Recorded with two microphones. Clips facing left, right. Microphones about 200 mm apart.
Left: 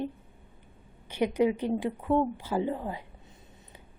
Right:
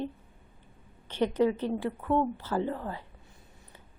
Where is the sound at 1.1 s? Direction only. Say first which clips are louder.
Even; 10° left (ahead or behind).